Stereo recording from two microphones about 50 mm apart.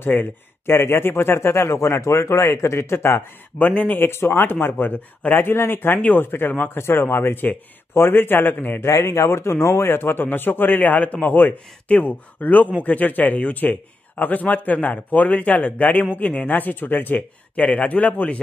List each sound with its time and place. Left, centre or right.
0.0 s speech: left
3.5 s a man's voice: left
4.0 s a man's voice: left
5.9 s a man's voice: left
6.7 s a man's voice: left
8.8 s a man's voice: left
17.6 s a man's voice: left